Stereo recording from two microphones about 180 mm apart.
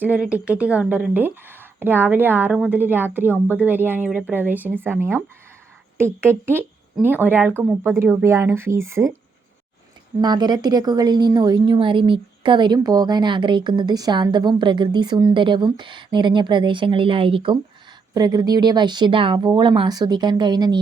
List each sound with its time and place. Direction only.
0.0 s a woman's voice: 10° right (ahead or behind)
10.2 s a woman's voice: 25° right (ahead or behind)